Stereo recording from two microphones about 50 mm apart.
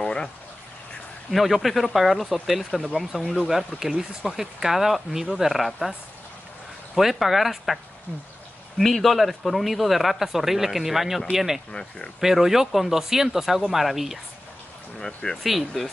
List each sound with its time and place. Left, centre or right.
0.0 s a sound: centre
1.3 s speech: centre
7.0 s speech: centre
15.4 s speech: centre